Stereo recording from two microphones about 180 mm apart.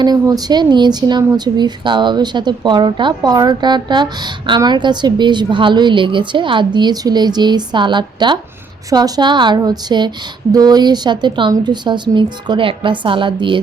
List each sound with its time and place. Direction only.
0.0 s speech: 20° right (ahead or behind)